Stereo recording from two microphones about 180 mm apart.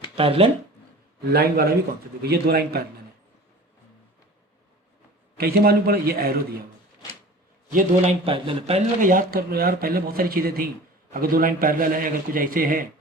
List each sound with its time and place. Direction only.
0.2 s speech: 30° right (ahead or behind)
1.3 s speech: 60° right (ahead or behind)
5.4 s speech: 55° right (ahead or behind)
7.7 s a man's voice: 50° right (ahead or behind)
8.2 s speech: 30° right (ahead or behind)
9.0 s a man's voice: 50° right (ahead or behind)